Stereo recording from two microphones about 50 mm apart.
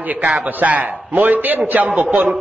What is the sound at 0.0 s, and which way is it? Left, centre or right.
A man's voice, right.